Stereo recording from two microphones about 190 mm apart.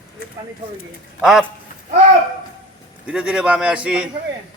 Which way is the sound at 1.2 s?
Centre (ahead or behind).